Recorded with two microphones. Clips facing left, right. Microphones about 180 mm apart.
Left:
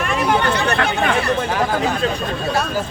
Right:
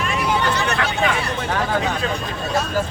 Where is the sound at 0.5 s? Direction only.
55° left (ahead or behind).